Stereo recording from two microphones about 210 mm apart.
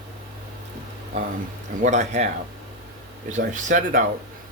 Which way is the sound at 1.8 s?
35° right (ahead or behind).